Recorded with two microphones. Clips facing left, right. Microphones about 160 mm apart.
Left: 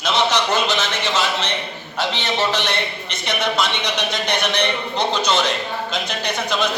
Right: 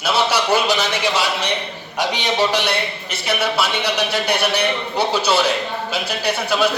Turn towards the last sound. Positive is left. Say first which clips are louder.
# right 3 dB
turn(degrees=-10)  # may be behind; listen again after turning